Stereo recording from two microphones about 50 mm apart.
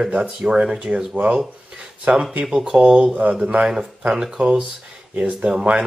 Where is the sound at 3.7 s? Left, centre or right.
Centre.